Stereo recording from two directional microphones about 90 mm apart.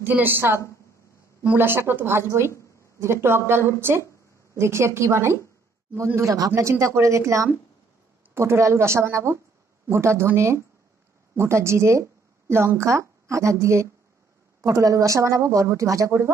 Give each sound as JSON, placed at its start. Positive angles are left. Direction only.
{"t": 0.0, "sound": "a woman's voice", "side_deg": -20}